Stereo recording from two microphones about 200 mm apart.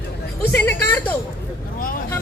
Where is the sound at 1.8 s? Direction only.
45° left (ahead or behind).